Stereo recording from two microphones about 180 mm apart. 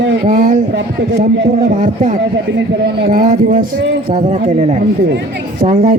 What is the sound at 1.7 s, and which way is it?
Speech, 45° right (ahead or behind).